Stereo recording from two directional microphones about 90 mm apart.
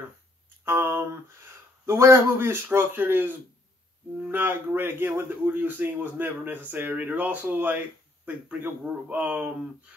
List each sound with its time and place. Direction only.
0.7 s speech: 25° right (ahead or behind)